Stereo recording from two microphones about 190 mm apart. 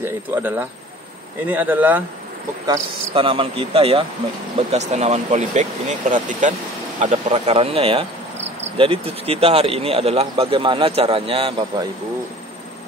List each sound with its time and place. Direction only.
0.0 s speech: 10° right (ahead or behind)
3.1 s speech: 30° right (ahead or behind)